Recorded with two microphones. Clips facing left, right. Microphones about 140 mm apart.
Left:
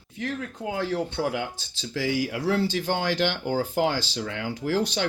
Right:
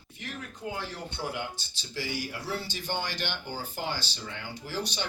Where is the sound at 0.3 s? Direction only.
90° left.